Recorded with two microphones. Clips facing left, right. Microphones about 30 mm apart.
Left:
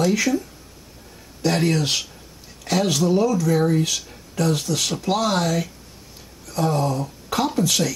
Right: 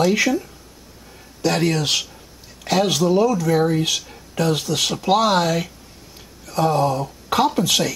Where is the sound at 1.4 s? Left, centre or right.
Centre.